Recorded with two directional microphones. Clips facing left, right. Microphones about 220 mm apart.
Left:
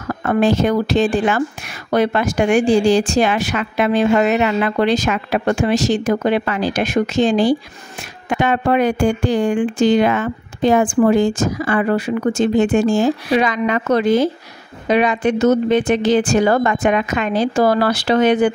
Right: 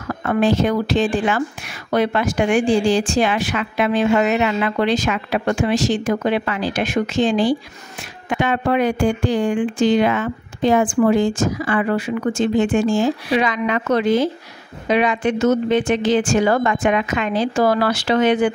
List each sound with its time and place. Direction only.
0.2 s a woman's voice: 45° left (ahead or behind)